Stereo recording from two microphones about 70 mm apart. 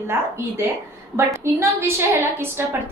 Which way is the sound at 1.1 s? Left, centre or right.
Right.